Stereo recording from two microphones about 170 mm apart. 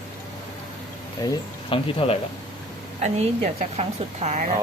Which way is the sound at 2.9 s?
40° right (ahead or behind).